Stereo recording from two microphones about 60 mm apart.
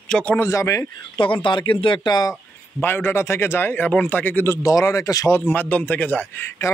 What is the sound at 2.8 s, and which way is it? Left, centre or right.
A man's voice, left.